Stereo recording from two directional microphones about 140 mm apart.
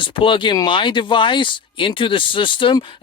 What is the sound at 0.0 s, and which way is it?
Speech, 35° left (ahead or behind).